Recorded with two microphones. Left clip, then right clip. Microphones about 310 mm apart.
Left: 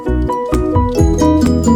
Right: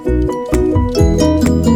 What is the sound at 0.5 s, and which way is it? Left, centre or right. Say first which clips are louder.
Music: right 3 dB; centre.